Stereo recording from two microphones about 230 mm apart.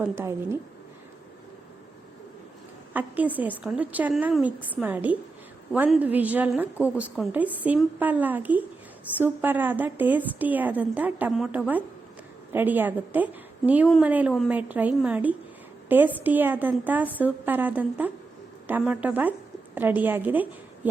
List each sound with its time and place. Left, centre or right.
2.9 s a woman's voice: centre